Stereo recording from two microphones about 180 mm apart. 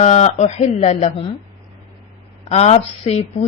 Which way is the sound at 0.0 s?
40° left (ahead or behind).